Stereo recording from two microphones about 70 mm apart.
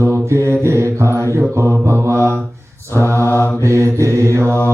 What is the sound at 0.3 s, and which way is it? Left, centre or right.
Mantra, right.